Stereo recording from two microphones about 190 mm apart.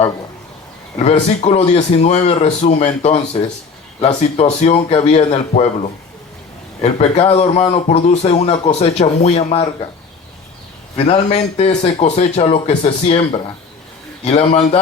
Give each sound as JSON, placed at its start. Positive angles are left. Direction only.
{"t": 0.9, "sound": "speech", "side_deg": 35}
{"t": 6.8, "sound": "speech", "side_deg": 35}
{"t": 10.9, "sound": "speech", "side_deg": 35}